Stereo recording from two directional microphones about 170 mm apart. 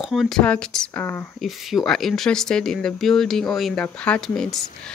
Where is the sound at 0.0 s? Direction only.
Centre (ahead or behind).